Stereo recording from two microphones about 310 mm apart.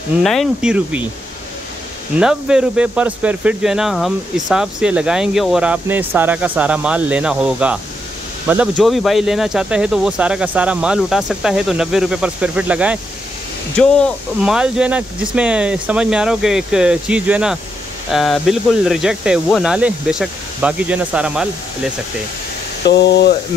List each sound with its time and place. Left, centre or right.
0.2 s speech: centre
2.1 s speech: centre
22.8 s speech: left